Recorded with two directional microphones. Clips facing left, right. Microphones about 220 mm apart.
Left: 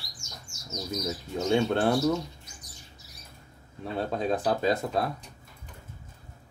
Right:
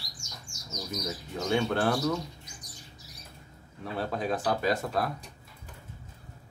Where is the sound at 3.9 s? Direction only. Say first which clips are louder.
Left 3 dB; 25° left (ahead or behind).